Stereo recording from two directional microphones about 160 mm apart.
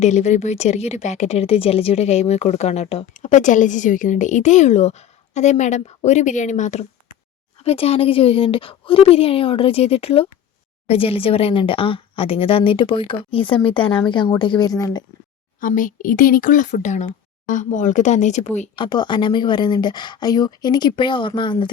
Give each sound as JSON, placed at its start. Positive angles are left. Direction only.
{"t": 0.0, "sound": "a woman's voice", "side_deg": 45}
{"t": 15.6, "sound": "a woman's voice", "side_deg": 55}
{"t": 18.8, "sound": "speech", "side_deg": 30}